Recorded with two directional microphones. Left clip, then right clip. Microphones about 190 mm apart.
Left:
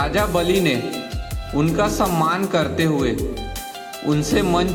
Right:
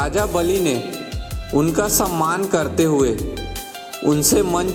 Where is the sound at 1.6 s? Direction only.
40° right (ahead or behind).